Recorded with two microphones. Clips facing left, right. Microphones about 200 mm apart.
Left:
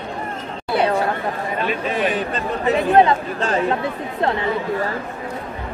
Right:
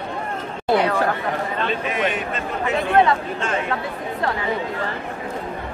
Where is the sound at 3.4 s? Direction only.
35° left (ahead or behind).